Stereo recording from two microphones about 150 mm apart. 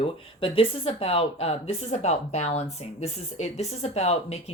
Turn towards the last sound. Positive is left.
turn(degrees=45)  # may be behind; listen again after turning